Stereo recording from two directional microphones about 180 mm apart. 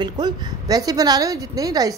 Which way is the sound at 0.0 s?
25° right (ahead or behind).